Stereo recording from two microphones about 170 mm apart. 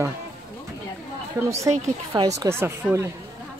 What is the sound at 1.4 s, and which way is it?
Speech, 15° right (ahead or behind).